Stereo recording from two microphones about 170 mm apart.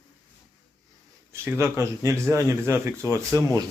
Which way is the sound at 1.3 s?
15° right (ahead or behind).